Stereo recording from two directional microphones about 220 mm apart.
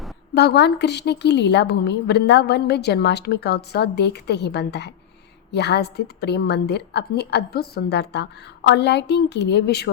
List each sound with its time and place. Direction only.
0.3 s speech: 50° left (ahead or behind)